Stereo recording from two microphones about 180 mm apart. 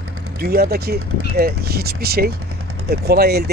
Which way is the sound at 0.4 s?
60° right (ahead or behind).